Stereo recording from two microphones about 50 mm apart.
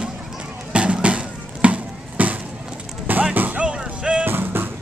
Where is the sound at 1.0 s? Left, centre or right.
Right.